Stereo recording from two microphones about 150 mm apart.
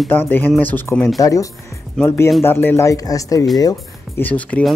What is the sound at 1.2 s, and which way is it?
A man's voice, 20° left (ahead or behind).